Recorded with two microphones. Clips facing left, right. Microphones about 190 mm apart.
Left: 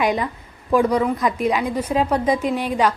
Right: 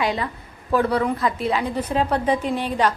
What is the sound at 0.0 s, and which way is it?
A woman's voice, 15° left (ahead or behind).